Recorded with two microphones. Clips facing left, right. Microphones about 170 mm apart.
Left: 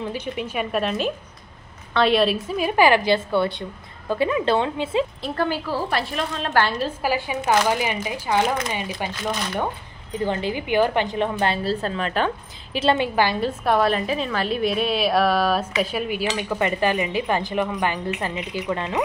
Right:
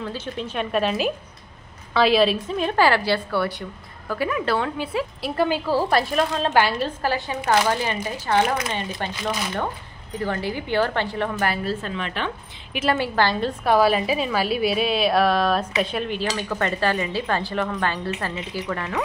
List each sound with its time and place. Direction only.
0.0 s a woman's voice: 15° left (ahead or behind)
5.2 s a woman's voice: 10° right (ahead or behind)
5.7 s a woman's voice: 40° right (ahead or behind)
7.0 s speech: 10° left (ahead or behind)
10.1 s a woman's voice: 20° left (ahead or behind); by 12.3 s 40° left (ahead or behind)
12.9 s a woman's voice: 15° left (ahead or behind)